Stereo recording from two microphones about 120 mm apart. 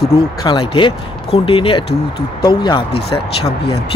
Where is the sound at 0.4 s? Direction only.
40° left (ahead or behind).